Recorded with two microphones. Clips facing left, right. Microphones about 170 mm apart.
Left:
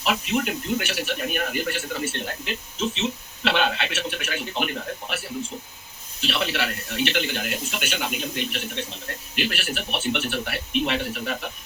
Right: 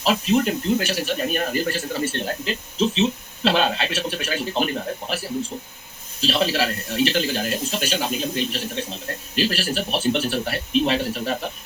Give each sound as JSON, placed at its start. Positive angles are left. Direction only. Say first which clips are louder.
{"t": 0.0, "sound": "speech", "louder": "right 5 dB", "side_deg": -35}
{"t": 6.2, "sound": "speech", "louder": "right 5 dB", "side_deg": -35}